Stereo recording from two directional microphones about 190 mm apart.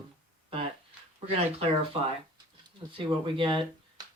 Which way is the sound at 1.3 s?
30° right (ahead or behind).